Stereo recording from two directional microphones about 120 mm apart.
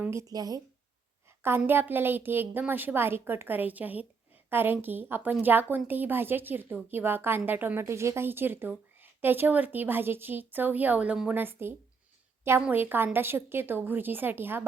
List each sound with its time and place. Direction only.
0.0 s speech: 25° right (ahead or behind)
1.4 s a woman's voice: 20° right (ahead or behind)